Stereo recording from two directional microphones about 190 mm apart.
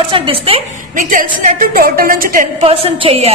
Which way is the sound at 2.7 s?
30° right (ahead or behind).